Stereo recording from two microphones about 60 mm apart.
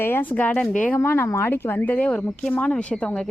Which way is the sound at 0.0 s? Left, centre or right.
Left.